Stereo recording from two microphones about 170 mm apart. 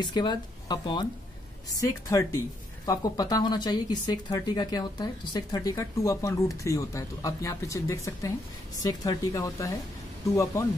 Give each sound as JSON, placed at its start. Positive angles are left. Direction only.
{"t": 0.0, "sound": "speech", "side_deg": 25}